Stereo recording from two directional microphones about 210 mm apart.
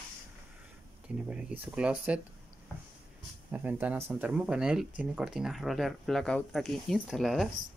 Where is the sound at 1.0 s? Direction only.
5° right (ahead or behind).